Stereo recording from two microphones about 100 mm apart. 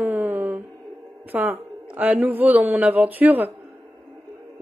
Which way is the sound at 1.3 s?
15° right (ahead or behind).